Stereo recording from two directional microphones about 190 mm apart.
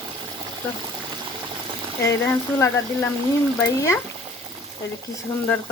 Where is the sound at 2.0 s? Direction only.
10° left (ahead or behind).